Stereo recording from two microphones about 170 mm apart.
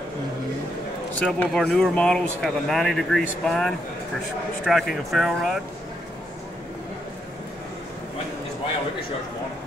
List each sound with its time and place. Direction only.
1.2 s speech: 5° left (ahead or behind)